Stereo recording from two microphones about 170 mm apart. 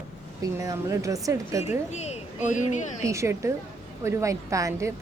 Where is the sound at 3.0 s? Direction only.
15° right (ahead or behind).